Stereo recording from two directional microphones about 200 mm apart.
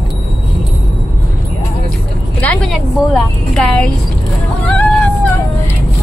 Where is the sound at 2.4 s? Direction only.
5° left (ahead or behind).